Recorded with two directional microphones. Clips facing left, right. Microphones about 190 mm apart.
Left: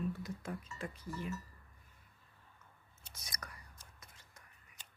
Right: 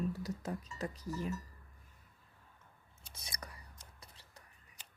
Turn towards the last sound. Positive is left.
turn(degrees=-35)  # may be behind; listen again after turning